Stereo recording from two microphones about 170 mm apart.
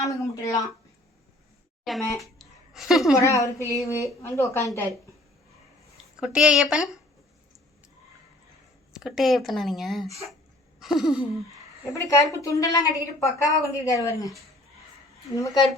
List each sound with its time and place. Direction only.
0.0 s a woman's voice: 20° left (ahead or behind)
1.9 s speech: centre (ahead or behind)
2.4 s a sound: centre (ahead or behind)
3.2 s a woman's voice: 20° left (ahead or behind)
6.1 s speech: 5° right (ahead or behind)
8.9 s speech: centre (ahead or behind)
12.0 s a woman's voice: 20° left (ahead or behind)
15.4 s a woman's voice: 20° left (ahead or behind)